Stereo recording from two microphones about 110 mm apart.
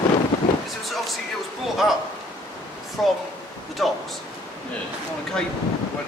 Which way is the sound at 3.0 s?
Centre (ahead or behind).